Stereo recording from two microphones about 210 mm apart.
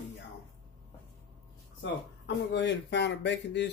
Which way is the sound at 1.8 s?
60° left (ahead or behind).